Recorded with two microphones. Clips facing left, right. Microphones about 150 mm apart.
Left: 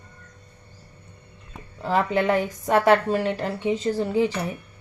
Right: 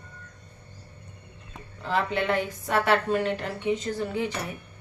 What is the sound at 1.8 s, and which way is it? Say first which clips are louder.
A woman's voice: left 5 dB; 40° left (ahead or behind).